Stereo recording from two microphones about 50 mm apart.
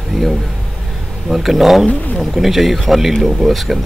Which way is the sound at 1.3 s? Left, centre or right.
Centre.